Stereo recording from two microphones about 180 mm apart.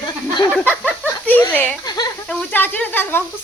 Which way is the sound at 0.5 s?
5° left (ahead or behind).